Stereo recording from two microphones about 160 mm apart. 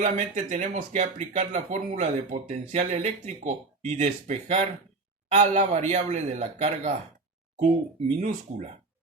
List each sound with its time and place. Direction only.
0.0 s speech: 45° right (ahead or behind)